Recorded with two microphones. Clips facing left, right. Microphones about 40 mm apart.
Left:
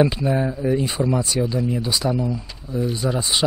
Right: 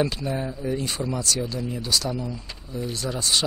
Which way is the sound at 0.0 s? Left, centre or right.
Centre.